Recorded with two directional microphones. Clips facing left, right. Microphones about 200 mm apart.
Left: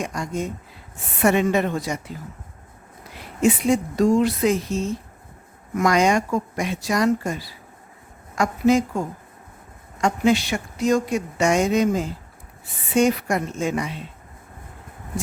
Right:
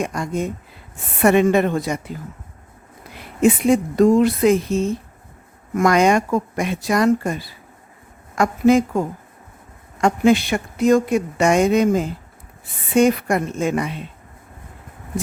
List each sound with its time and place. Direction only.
0.0 s speech: 55° right (ahead or behind)
3.4 s speech: 55° right (ahead or behind)
10.0 s speech: 55° right (ahead or behind)